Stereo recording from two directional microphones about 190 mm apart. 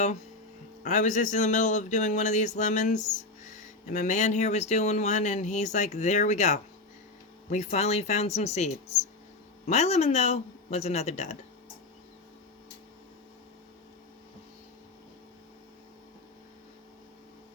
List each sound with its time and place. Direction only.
0.9 s speech: 40° left (ahead or behind)